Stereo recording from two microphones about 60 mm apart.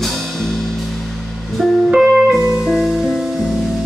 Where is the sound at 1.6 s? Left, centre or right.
Centre.